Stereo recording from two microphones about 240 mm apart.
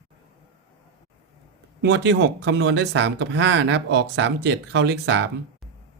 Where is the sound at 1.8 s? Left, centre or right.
Right.